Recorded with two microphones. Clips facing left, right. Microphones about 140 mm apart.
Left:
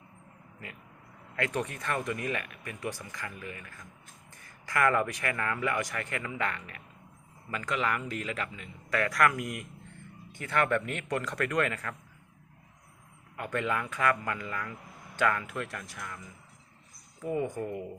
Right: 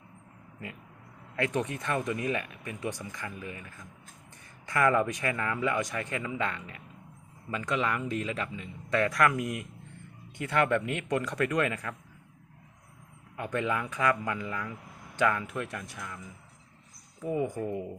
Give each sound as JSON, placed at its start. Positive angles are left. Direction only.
{"t": 1.4, "sound": "speech", "side_deg": -20}
{"t": 13.3, "sound": "speech", "side_deg": -20}
{"t": 17.3, "sound": "speech", "side_deg": -15}